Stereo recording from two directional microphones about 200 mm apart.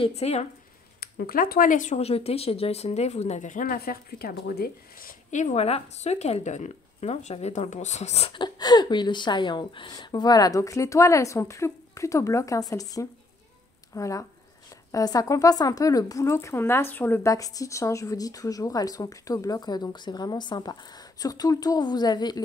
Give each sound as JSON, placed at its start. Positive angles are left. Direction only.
{"t": 0.0, "sound": "speech", "side_deg": 30}
{"t": 1.0, "sound": "speech", "side_deg": 50}